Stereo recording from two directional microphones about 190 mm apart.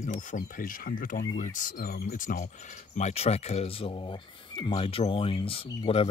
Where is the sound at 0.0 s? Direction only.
45° left (ahead or behind).